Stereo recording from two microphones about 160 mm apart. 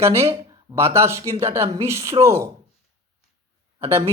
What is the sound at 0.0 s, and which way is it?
Speech, 15° right (ahead or behind).